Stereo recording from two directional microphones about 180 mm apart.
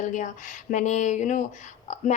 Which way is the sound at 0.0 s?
45° left (ahead or behind).